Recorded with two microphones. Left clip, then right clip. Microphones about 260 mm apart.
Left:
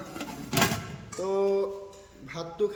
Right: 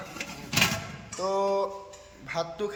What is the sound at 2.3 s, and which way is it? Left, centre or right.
Speech, centre.